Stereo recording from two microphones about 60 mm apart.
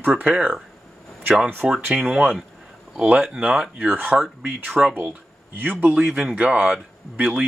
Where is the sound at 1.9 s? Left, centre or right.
Centre.